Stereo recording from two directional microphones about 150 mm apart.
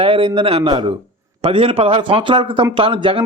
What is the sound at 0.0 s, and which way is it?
Speech, 35° right (ahead or behind).